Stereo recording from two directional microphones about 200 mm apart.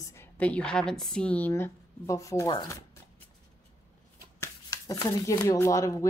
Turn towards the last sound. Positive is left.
turn(degrees=15)  # may be behind; listen again after turning